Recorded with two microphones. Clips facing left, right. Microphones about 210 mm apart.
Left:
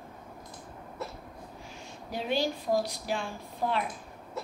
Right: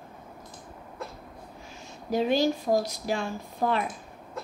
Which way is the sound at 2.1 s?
45° right (ahead or behind).